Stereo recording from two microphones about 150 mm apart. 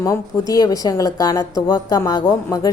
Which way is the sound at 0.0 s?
20° left (ahead or behind).